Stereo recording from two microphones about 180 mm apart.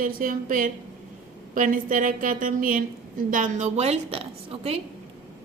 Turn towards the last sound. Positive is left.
turn(degrees=-35)  # may be behind; listen again after turning